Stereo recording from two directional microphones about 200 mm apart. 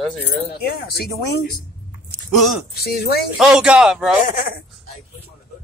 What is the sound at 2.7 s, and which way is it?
Speech, 50° left (ahead or behind).